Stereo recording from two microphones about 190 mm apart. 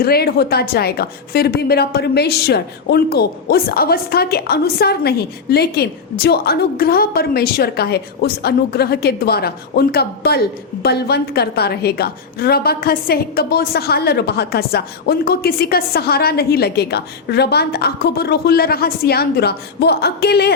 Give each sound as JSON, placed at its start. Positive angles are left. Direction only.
{"t": 0.0, "sound": "a woman's voice", "side_deg": 55}